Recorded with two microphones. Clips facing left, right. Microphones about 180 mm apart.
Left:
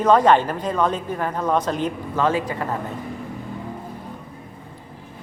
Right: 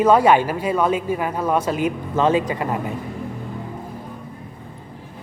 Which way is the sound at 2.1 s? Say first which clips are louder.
Right 3 dB; 20° right (ahead or behind).